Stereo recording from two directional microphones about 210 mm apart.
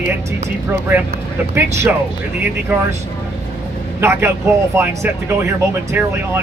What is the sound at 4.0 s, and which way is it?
A man's voice, 10° right (ahead or behind).